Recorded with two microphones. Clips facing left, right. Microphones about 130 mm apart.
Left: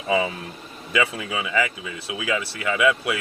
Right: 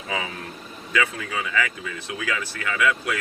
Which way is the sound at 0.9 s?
10° left (ahead or behind).